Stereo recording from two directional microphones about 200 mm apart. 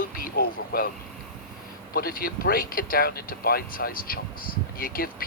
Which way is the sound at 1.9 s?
45° left (ahead or behind).